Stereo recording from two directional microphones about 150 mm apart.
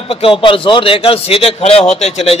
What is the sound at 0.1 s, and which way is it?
A man's voice, 35° left (ahead or behind).